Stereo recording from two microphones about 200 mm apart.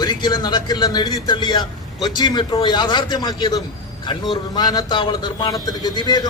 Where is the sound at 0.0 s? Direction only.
20° left (ahead or behind).